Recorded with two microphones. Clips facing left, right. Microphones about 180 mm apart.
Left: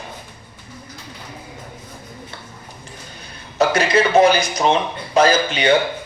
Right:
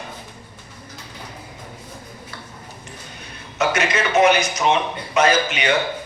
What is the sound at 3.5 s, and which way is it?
Speech, 35° left (ahead or behind).